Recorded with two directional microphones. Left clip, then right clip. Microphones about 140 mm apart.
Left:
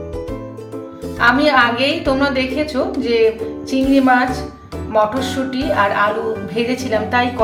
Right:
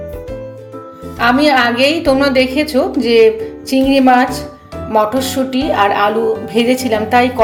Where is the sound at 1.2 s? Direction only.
65° right (ahead or behind).